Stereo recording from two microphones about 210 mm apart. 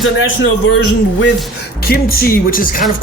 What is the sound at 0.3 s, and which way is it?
Speech, 65° left (ahead or behind).